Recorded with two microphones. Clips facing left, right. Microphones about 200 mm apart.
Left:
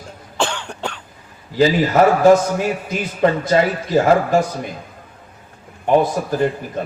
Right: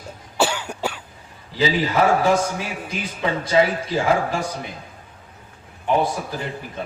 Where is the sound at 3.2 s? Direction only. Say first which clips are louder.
Left 4 dB; 50° left (ahead or behind).